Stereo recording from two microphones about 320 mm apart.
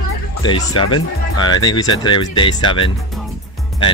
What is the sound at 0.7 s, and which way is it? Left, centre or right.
Speech, left.